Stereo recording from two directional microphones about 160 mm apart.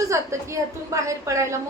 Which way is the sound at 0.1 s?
15° right (ahead or behind).